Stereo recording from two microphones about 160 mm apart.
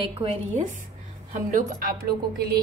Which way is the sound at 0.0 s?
35° right (ahead or behind).